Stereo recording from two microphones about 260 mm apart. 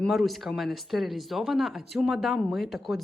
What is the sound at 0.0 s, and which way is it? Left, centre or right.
Speech, centre.